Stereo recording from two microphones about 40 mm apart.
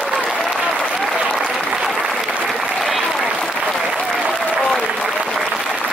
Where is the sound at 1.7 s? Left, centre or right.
Centre.